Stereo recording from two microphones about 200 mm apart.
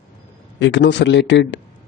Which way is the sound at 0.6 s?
65° left (ahead or behind).